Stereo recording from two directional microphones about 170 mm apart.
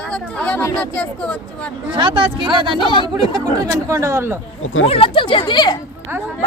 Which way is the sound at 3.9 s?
15° right (ahead or behind).